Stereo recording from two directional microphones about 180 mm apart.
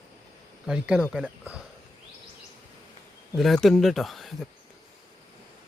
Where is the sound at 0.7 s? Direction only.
5° right (ahead or behind).